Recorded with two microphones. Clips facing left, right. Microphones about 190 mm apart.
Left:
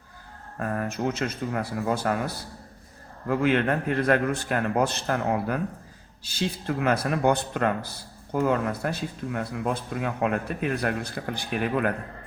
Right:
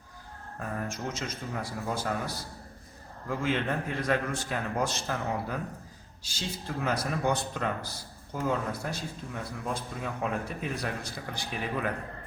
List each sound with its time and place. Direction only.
0.6 s speech: 65° left (ahead or behind)